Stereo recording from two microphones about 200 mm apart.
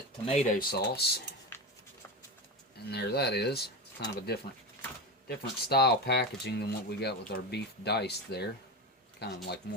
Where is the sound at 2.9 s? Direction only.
55° left (ahead or behind).